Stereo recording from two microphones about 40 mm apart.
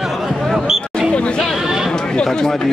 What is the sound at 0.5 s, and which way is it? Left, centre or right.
Basketball bounce, centre.